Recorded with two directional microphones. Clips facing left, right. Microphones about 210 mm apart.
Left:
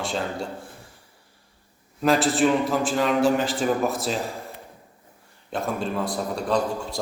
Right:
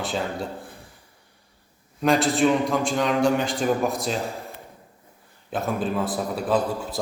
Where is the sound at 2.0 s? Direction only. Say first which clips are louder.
Even; centre (ahead or behind).